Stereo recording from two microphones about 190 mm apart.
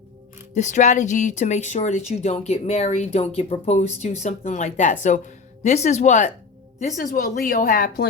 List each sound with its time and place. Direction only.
0.5 s a woman's voice: 40° left (ahead or behind)